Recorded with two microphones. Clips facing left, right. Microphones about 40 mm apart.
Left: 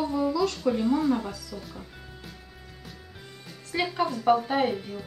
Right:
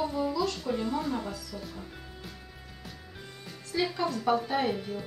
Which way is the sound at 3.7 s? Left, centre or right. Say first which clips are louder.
Left 3 dB; left.